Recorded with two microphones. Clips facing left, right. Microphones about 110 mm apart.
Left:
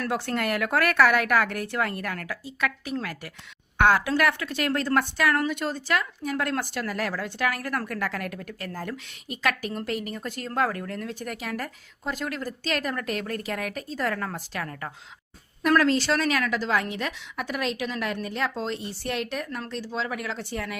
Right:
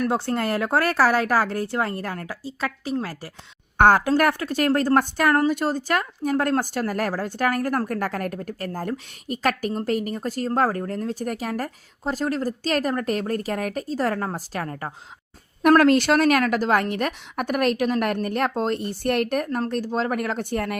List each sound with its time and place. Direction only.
0.0 s speech: 30° right (ahead or behind)
3.8 s speech: 45° right (ahead or behind)
15.7 s a woman's voice: 55° right (ahead or behind)